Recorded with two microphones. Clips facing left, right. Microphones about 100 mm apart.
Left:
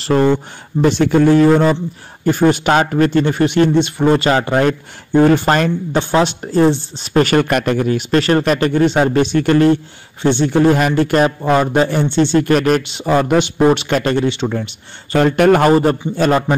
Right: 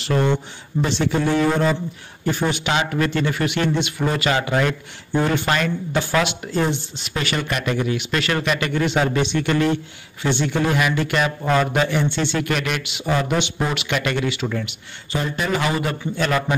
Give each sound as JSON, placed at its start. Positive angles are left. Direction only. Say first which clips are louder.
{"t": 0.0, "sound": "speech", "louder": "left 7 dB", "side_deg": 40}
{"t": 15.1, "sound": "speech", "louder": "left 12 dB", "side_deg": 65}
{"t": 15.7, "sound": "speech", "louder": "left 11 dB", "side_deg": 40}